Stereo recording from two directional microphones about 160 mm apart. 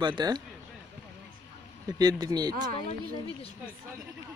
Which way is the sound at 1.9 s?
25° right (ahead or behind).